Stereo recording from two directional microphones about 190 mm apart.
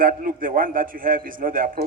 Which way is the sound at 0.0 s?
45° right (ahead or behind).